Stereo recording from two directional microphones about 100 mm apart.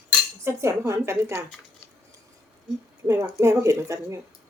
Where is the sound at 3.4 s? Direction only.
30° right (ahead or behind).